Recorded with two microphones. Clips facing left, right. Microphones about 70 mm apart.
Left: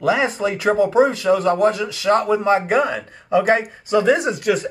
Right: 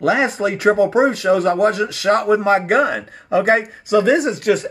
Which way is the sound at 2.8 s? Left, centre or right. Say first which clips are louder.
Right 3 dB; centre.